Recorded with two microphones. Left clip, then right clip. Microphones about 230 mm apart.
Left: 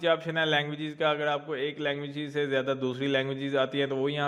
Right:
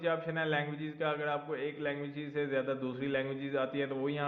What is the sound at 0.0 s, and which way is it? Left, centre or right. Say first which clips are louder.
A man's voice: left 7 dB; left.